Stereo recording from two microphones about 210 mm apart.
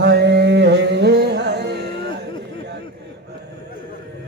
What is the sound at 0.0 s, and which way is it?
Music, 50° right (ahead or behind).